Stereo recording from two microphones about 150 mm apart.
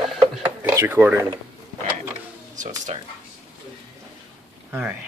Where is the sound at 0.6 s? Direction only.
15° right (ahead or behind).